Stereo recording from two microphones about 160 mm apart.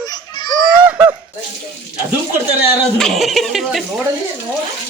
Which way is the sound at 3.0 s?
Centre (ahead or behind).